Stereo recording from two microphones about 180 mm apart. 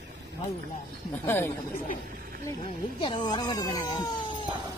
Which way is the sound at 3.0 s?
25° left (ahead or behind).